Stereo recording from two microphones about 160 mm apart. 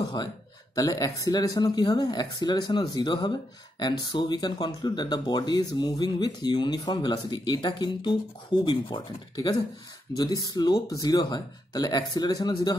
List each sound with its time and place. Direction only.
0.0 s speech: 25° left (ahead or behind)